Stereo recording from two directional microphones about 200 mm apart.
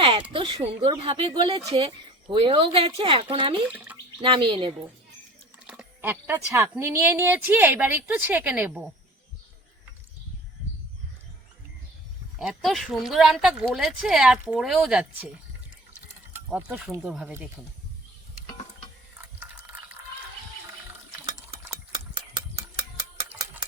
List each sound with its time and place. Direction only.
0.0 s speech: 25° right (ahead or behind)
3.7 s speech: 5° right (ahead or behind)
4.2 s speech: 25° right (ahead or behind)
5.6 s speech: 5° right (ahead or behind)
12.4 s speech: centre (ahead or behind)
16.3 s speech: 10° right (ahead or behind)
19.4 s boiling: 10° right (ahead or behind)